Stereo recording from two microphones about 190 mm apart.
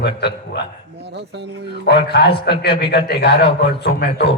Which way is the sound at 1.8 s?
60° left (ahead or behind).